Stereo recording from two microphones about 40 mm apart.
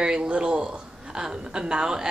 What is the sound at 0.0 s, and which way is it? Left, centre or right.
A woman's voice, right.